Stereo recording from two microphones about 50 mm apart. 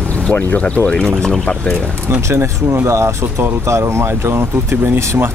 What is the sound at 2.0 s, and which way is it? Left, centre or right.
Speech, right.